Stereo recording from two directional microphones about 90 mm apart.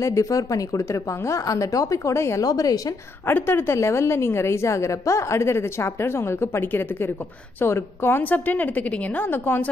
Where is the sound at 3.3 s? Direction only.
25° left (ahead or behind).